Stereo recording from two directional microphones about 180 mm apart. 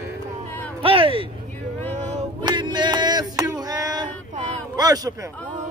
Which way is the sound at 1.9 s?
40° right (ahead or behind).